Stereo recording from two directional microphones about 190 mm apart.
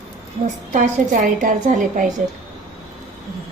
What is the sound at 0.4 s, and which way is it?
A woman's voice, 40° right (ahead or behind).